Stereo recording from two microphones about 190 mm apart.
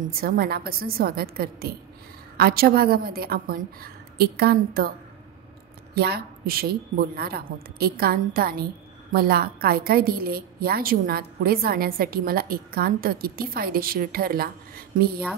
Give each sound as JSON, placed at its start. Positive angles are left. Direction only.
{"t": 0.0, "sound": "a woman's voice", "side_deg": -50}
{"t": 5.9, "sound": "a woman's voice", "side_deg": -55}